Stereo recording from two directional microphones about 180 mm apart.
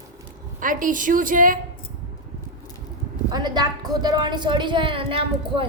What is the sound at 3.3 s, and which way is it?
Speech, 25° right (ahead or behind).